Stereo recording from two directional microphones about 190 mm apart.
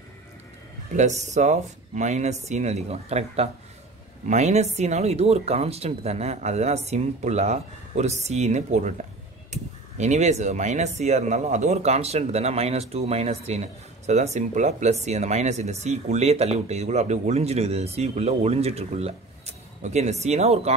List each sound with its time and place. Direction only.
0.9 s speech: 40° right (ahead or behind)